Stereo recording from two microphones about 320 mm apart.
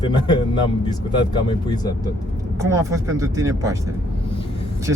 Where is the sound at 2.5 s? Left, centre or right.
Centre.